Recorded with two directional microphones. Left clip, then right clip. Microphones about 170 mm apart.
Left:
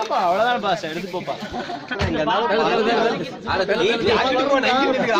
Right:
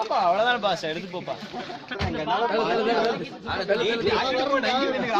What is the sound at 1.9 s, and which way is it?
Speech, 40° left (ahead or behind).